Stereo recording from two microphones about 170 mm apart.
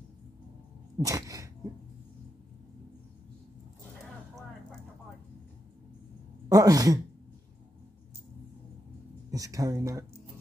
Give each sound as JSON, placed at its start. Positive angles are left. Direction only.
{"t": 0.9, "sound": "sneeze", "side_deg": -20}
{"t": 6.5, "sound": "speech", "side_deg": -20}
{"t": 9.3, "sound": "speech", "side_deg": -20}